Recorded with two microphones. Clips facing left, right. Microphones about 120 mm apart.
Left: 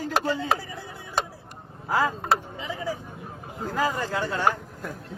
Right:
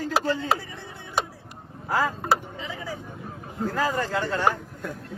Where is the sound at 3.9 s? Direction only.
10° left (ahead or behind).